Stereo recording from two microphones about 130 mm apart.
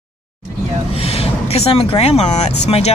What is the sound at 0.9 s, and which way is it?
Speech, 50° left (ahead or behind).